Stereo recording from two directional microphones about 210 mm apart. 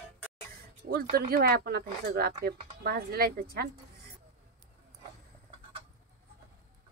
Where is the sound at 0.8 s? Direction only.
45° right (ahead or behind).